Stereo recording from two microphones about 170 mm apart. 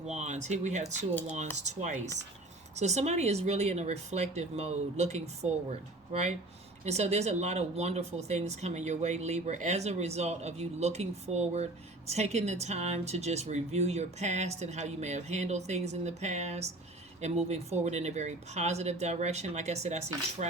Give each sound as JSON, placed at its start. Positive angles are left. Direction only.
{"t": 0.1, "sound": "speech", "side_deg": -45}